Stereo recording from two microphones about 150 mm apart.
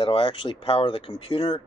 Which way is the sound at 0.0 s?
40° left (ahead or behind).